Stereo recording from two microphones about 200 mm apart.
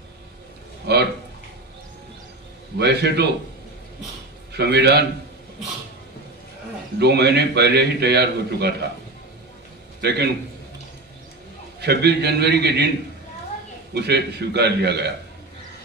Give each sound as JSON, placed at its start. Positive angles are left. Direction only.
{"t": 0.9, "sound": "a man's voice", "side_deg": -55}
{"t": 2.8, "sound": "a man's voice", "side_deg": -55}
{"t": 4.6, "sound": "a man's voice", "side_deg": -55}
{"t": 7.0, "sound": "a man's voice", "side_deg": -55}
{"t": 10.0, "sound": "a man's voice", "side_deg": -55}
{"t": 11.8, "sound": "a man's voice", "side_deg": -55}
{"t": 13.9, "sound": "a man's voice", "side_deg": -55}